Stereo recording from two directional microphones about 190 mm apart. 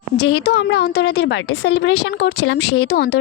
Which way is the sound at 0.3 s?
60° left (ahead or behind).